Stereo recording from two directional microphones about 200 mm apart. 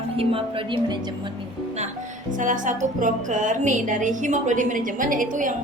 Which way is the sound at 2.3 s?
40° right (ahead or behind).